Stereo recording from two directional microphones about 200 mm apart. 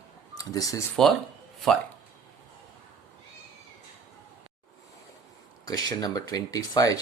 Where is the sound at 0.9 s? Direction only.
Centre (ahead or behind).